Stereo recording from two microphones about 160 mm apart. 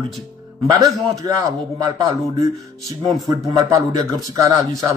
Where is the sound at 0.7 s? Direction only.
20° right (ahead or behind).